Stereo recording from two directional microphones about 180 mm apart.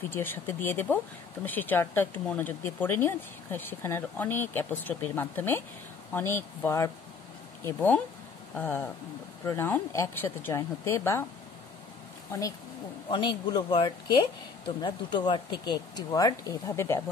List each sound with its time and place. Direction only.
0.1 s speech: 10° left (ahead or behind)
12.3 s speech: 20° left (ahead or behind)